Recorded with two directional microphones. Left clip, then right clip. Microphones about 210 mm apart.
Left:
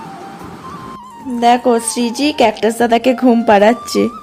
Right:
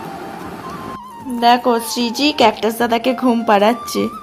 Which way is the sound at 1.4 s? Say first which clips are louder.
Left 2 dB; 15° left (ahead or behind).